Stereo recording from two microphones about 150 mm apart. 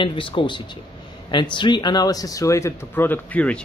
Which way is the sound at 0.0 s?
35° left (ahead or behind).